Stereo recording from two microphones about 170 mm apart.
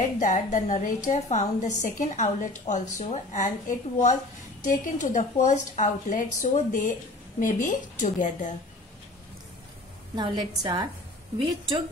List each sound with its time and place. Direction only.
0.2 s a woman's voice: 50° left (ahead or behind)
10.1 s a woman's voice: 25° right (ahead or behind)